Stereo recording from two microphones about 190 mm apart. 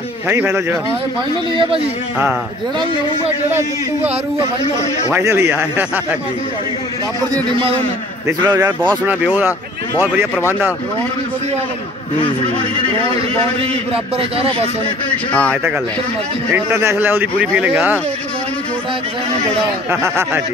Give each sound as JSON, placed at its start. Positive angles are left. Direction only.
{"t": 0.3, "sound": "a man's voice", "side_deg": -10}
{"t": 3.4, "sound": "a man's voice", "side_deg": -10}
{"t": 5.1, "sound": "a man's voice", "side_deg": -15}
{"t": 8.3, "sound": "a man's voice", "side_deg": -15}
{"t": 14.1, "sound": "speech", "side_deg": -30}
{"t": 16.5, "sound": "a man's voice", "side_deg": -10}
{"t": 19.9, "sound": "a man's voice", "side_deg": -10}